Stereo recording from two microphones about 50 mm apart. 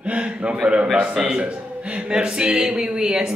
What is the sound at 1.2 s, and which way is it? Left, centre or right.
Speech, centre.